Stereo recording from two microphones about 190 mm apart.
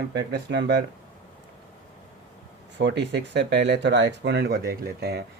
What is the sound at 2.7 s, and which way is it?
Speech, 65° right (ahead or behind).